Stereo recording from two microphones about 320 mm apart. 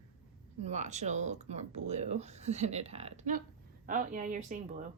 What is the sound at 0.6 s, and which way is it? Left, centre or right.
A woman's voice, right.